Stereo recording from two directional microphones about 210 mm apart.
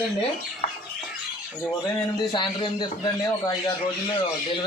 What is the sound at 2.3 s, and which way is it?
A man's voice, 20° left (ahead or behind).